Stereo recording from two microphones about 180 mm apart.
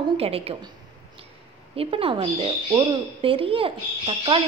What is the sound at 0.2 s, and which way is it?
Speech, 35° right (ahead or behind).